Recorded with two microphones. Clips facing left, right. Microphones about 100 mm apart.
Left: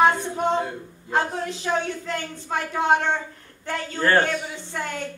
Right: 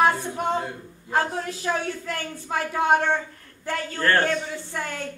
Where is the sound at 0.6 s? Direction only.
Centre (ahead or behind).